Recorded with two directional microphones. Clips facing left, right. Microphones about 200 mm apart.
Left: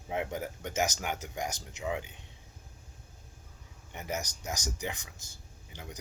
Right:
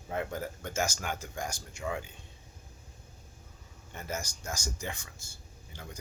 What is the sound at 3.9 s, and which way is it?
Speech, 15° left (ahead or behind).